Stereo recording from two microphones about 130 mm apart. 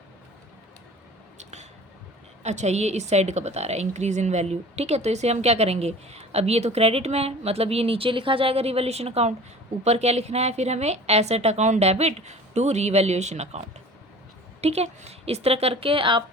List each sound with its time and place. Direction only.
1.4 s a sound: 60° right (ahead or behind)
2.4 s a woman's voice: 60° right (ahead or behind)
14.6 s a woman's voice: 55° right (ahead or behind)